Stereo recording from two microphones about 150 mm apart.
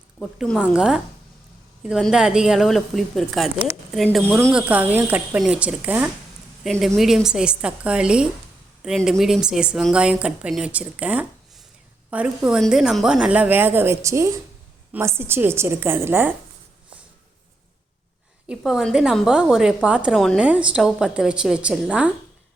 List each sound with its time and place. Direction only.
0.2 s a woman's voice: centre (ahead or behind)
4.5 s a woman's voice: 10° right (ahead or behind)
6.7 s a woman's voice: centre (ahead or behind); by 16.3 s 15° right (ahead or behind)
18.4 s a woman's voice: 5° right (ahead or behind)